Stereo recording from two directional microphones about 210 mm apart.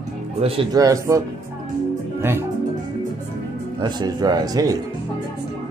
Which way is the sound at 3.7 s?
20° right (ahead or behind).